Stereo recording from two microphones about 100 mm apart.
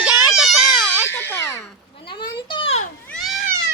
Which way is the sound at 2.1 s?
55° left (ahead or behind).